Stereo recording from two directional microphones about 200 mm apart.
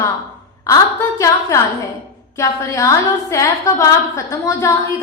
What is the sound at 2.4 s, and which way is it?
A woman's voice, 15° left (ahead or behind).